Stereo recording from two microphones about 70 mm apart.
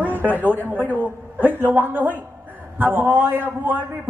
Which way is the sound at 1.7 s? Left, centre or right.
Right.